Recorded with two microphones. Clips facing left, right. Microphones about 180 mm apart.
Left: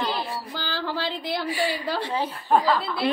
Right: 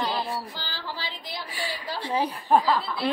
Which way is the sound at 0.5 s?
60° left (ahead or behind).